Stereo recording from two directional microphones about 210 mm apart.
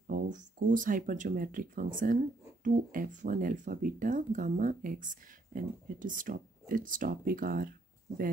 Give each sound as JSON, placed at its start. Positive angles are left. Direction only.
{"t": 0.0, "sound": "speech", "side_deg": -40}